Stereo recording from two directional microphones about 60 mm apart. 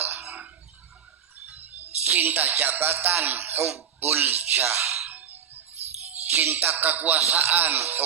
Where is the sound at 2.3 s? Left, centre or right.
Right.